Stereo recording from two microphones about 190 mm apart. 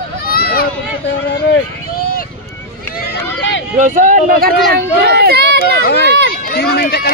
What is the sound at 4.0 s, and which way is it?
Speech, 45° right (ahead or behind).